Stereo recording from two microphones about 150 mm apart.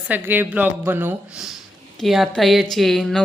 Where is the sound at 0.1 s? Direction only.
15° right (ahead or behind).